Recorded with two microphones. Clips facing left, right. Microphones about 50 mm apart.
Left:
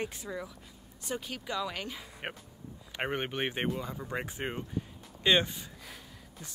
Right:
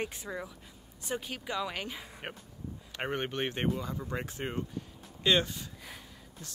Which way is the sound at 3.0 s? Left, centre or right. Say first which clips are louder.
Left 1 dB; centre.